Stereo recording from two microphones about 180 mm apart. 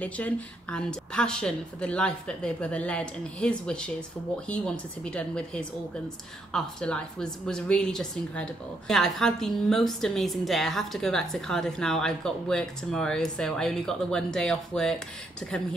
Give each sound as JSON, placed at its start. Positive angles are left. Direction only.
{"t": 0.0, "sound": "a woman's voice", "side_deg": 5}